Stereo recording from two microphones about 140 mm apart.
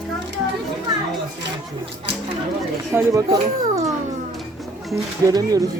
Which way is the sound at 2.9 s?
25° right (ahead or behind).